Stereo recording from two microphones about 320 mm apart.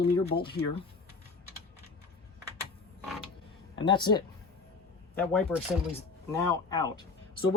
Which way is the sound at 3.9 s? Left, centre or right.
Centre.